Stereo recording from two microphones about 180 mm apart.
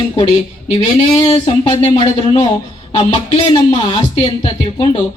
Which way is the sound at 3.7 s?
25° left (ahead or behind).